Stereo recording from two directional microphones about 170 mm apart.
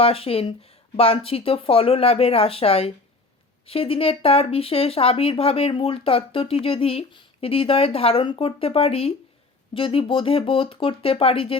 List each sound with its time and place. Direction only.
0.0 s speech: 35° left (ahead or behind)